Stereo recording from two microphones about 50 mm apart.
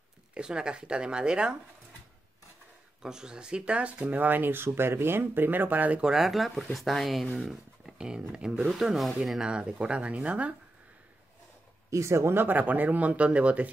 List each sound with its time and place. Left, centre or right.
0.3 s speech: centre
3.0 s speech: centre; by 5.9 s right
5.9 s speech: centre
8.0 s speech: centre
8.6 s speech: centre
9.4 s speech: right
11.9 s speech: right
12.4 s speech: right